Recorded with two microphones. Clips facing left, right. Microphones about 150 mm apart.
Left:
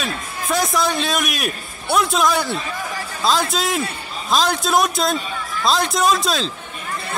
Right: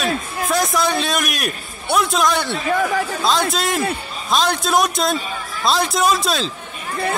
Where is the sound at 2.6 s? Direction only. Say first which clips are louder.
Right 9 dB; 60° right (ahead or behind).